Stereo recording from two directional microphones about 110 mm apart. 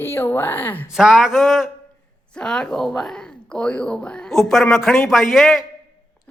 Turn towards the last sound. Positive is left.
turn(degrees=0)  # may be behind; listen again after turning